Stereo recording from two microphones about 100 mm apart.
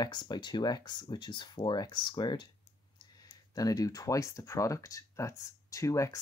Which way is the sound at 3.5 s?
40° left (ahead or behind).